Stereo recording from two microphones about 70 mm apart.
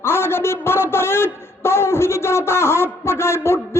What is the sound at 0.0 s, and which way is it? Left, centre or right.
A man's voice, left.